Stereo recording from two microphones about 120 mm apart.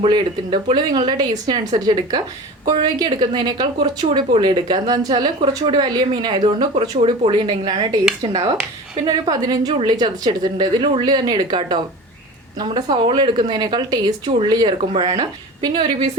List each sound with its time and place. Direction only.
0.1 s a woman's voice: 40° right (ahead or behind)